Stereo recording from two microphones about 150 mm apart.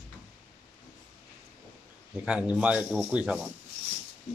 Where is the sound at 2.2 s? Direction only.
5° right (ahead or behind).